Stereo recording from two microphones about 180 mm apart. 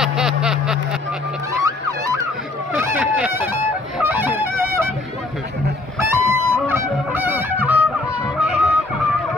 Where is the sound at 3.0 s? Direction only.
10° right (ahead or behind).